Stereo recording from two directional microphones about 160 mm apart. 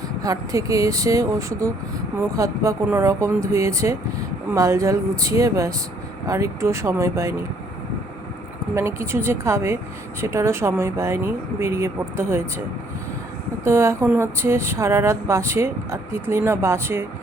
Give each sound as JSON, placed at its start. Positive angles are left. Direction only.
{"t": 0.2, "sound": "speech", "side_deg": -20}
{"t": 8.7, "sound": "speech", "side_deg": -15}
{"t": 13.7, "sound": "speech", "side_deg": -15}